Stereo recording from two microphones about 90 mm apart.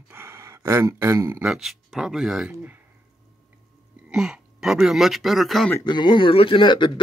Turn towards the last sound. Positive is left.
turn(degrees=60)  # may be behind; listen again after turning